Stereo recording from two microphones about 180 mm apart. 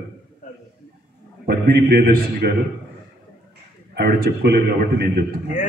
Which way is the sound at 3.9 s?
60° right (ahead or behind).